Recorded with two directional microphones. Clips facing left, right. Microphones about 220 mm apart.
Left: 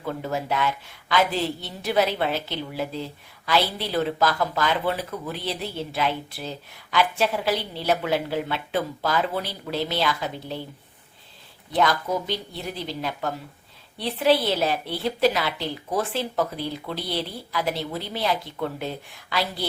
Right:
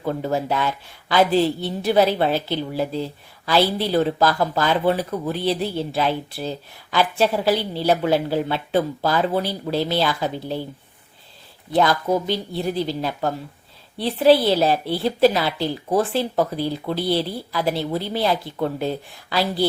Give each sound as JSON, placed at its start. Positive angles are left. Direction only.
{"t": 0.0, "sound": "speech", "side_deg": -35}
{"t": 11.7, "sound": "speech", "side_deg": -35}